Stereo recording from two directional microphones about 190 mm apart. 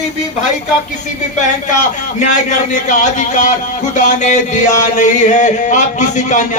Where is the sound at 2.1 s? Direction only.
40° left (ahead or behind).